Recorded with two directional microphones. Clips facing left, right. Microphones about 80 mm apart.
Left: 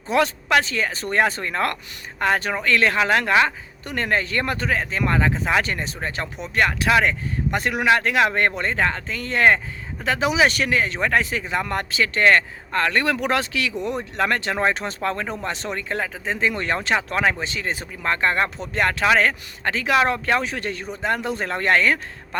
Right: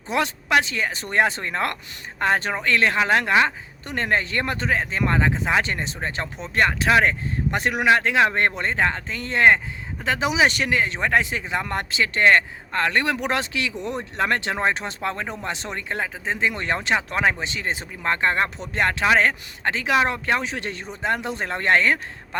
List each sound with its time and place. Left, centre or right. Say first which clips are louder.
0.1 s speech: left 2 dB; centre